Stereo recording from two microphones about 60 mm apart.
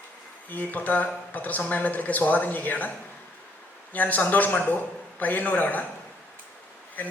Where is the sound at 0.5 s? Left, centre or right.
Left.